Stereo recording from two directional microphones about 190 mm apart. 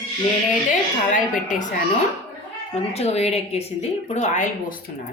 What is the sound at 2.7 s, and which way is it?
A woman's voice, 35° left (ahead or behind).